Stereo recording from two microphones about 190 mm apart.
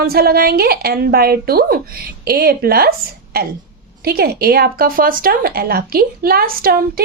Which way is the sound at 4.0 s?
55° right (ahead or behind).